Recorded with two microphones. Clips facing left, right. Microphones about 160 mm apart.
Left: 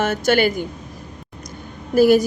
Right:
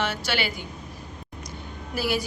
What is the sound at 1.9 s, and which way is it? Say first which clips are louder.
Speech: left 14 dB; 45° left (ahead or behind).